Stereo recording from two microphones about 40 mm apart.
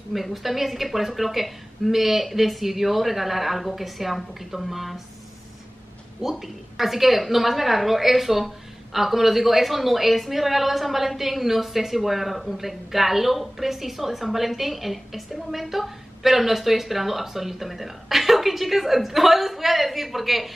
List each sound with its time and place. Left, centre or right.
0.1 s a woman's voice: centre
6.3 s a woman's voice: centre